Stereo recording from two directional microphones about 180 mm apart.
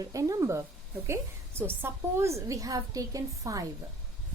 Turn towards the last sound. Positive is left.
turn(degrees=-20)  # may be behind; listen again after turning